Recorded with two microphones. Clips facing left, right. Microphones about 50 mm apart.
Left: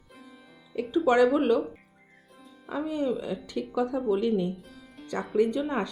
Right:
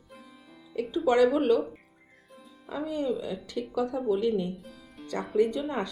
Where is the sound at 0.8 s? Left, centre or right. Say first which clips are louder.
Left 1 dB; centre.